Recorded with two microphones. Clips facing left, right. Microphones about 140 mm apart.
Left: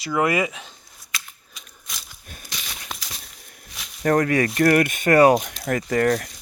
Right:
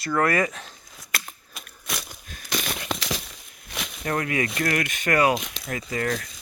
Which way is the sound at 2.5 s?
55° right (ahead or behind).